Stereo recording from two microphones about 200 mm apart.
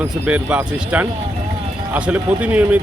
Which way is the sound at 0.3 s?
5° right (ahead or behind).